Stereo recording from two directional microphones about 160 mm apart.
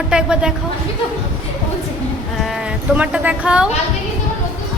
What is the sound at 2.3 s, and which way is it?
Speech, centre (ahead or behind).